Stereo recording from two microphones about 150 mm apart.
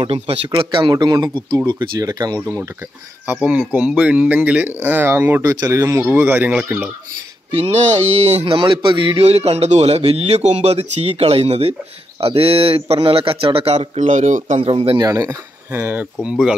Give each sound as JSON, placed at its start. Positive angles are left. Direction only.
{"t": 0.0, "sound": "speech", "side_deg": -40}
{"t": 7.5, "sound": "speech", "side_deg": -40}
{"t": 13.7, "sound": "speech", "side_deg": -50}
{"t": 14.6, "sound": "speech", "side_deg": -40}
{"t": 15.0, "sound": "speech", "side_deg": -25}
{"t": 15.8, "sound": "speech", "side_deg": -10}